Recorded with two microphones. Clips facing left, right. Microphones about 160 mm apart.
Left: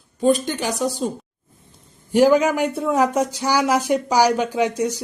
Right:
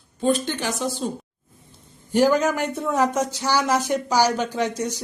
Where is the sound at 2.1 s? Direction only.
10° left (ahead or behind).